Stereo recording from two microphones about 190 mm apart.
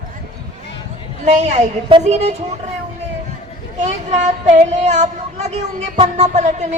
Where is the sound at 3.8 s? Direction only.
40° right (ahead or behind).